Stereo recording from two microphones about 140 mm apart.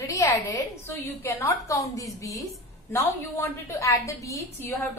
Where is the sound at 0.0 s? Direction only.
25° left (ahead or behind).